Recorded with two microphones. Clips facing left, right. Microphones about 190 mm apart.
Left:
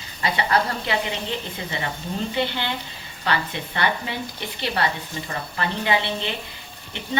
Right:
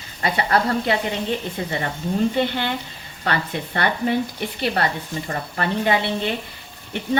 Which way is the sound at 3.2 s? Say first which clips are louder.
Right 1 dB; 50° right (ahead or behind).